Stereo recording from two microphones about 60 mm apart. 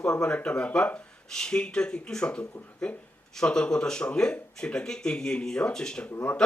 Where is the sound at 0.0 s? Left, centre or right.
Centre.